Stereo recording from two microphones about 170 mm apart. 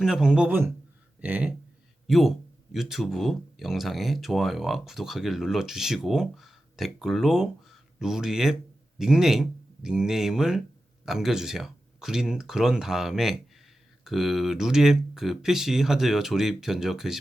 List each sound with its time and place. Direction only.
0.0 s speech: 5° right (ahead or behind)